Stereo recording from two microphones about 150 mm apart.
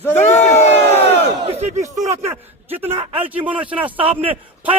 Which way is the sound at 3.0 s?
35° right (ahead or behind).